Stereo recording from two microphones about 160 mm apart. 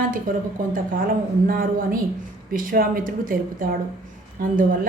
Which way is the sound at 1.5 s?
60° right (ahead or behind).